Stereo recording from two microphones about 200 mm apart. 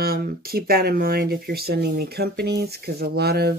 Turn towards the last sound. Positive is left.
turn(degrees=-55)  # may be behind; listen again after turning